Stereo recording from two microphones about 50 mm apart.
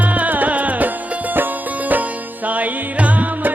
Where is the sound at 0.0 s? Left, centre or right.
Right.